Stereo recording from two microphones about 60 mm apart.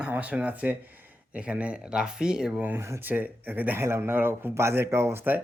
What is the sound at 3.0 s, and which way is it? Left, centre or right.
Speech, right.